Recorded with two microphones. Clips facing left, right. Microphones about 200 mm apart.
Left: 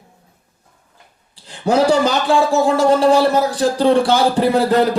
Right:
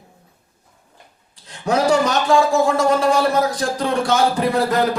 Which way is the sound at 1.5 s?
30° left (ahead or behind).